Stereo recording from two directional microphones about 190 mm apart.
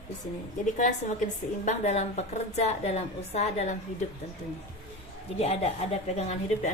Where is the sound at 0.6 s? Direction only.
40° left (ahead or behind).